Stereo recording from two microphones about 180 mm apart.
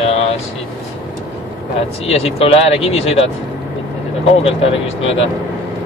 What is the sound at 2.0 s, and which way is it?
Speech, 35° left (ahead or behind).